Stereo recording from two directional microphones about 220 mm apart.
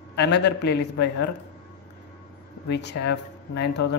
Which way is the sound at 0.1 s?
50° left (ahead or behind).